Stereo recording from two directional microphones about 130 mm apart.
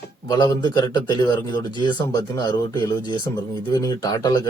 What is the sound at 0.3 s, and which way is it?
Speech, 30° left (ahead or behind).